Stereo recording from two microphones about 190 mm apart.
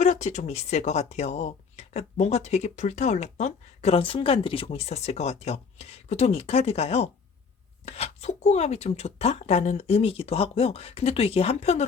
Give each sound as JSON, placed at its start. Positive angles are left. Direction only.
{"t": 0.0, "sound": "speech", "side_deg": 40}